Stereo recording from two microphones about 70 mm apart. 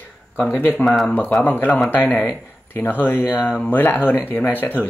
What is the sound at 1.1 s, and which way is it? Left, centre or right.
Speech, left.